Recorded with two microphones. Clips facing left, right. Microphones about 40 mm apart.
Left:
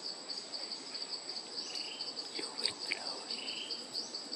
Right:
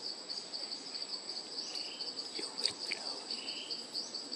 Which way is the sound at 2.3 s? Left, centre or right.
Centre.